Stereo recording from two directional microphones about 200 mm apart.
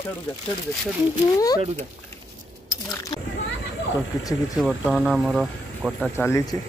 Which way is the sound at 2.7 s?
15° left (ahead or behind).